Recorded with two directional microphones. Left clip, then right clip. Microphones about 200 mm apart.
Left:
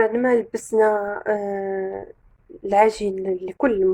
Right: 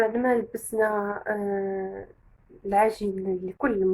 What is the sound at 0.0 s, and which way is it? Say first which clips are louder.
A woman's voice: left 5 dB; 45° left (ahead or behind).